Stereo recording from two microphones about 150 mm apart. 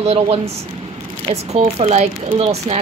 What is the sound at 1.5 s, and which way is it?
Speech, 45° right (ahead or behind).